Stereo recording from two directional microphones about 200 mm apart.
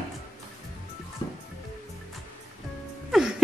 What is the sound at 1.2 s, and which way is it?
Music, 20° left (ahead or behind).